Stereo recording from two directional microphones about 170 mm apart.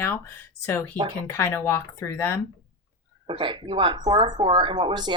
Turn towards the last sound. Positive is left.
turn(degrees=-25)  # may be behind; listen again after turning